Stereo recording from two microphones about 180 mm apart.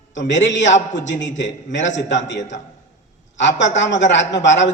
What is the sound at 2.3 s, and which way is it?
Speech, 40° left (ahead or behind).